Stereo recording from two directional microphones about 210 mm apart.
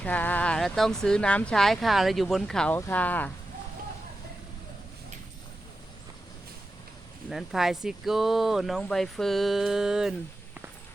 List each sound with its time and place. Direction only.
0.0 s speech: 10° left (ahead or behind)
7.3 s speech: centre (ahead or behind)